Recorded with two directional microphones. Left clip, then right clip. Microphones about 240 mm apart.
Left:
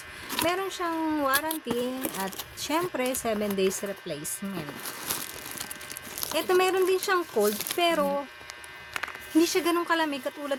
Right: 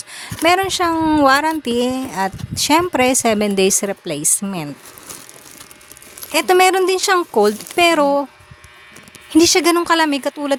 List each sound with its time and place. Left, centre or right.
0.4 s speech: left
6.3 s speech: left
9.4 s speech: left